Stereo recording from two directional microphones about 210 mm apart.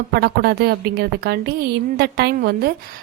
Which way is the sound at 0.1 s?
50° right (ahead or behind).